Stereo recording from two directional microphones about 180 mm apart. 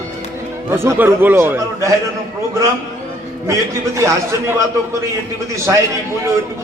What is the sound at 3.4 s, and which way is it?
A man's voice, 15° right (ahead or behind).